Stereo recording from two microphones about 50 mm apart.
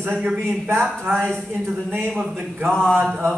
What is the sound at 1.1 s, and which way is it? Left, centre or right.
Speech, centre.